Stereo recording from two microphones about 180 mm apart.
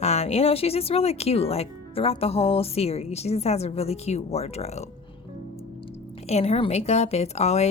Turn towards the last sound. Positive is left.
turn(degrees=35)  # may be behind; listen again after turning